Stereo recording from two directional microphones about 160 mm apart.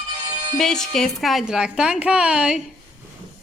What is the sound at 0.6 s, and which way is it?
A woman's voice, 5° left (ahead or behind).